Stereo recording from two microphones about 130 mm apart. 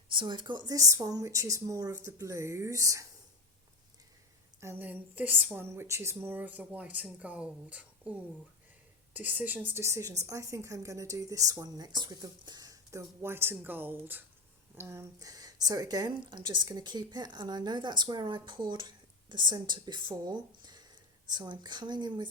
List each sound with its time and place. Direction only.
0.1 s a woman's voice: 40° right (ahead or behind)
4.6 s a woman's voice: 15° right (ahead or behind); by 22.3 s 35° right (ahead or behind)